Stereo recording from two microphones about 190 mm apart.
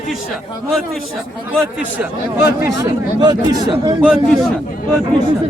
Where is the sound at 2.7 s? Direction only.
20° right (ahead or behind).